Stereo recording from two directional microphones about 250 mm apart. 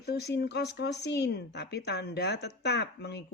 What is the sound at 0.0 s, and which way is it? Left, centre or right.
A woman's voice, left.